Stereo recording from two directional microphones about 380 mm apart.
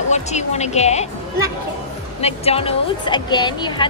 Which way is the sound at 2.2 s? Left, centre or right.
Centre.